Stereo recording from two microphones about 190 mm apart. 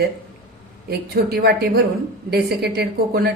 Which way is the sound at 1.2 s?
55° right (ahead or behind).